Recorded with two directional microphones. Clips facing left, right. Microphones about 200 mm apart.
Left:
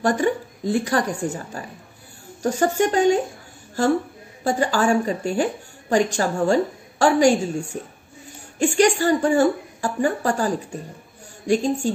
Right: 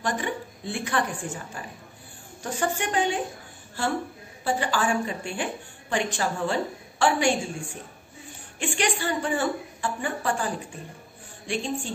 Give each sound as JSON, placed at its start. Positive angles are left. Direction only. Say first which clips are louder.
{"t": 0.0, "sound": "a woman's voice", "louder": "left 9 dB", "side_deg": 45}